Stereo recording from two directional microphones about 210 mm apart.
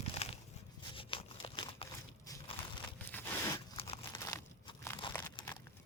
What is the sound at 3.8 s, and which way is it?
Crumpling, 30° left (ahead or behind).